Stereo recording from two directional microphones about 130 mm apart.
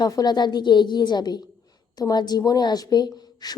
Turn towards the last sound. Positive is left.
turn(degrees=30)  # may be behind; listen again after turning